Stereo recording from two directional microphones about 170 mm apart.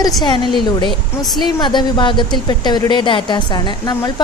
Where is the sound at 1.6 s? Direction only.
25° left (ahead or behind).